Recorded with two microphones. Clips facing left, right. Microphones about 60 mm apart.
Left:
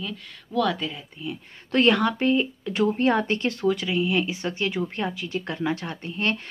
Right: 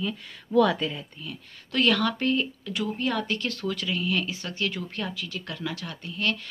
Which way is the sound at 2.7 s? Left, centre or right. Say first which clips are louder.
Left 8 dB; left.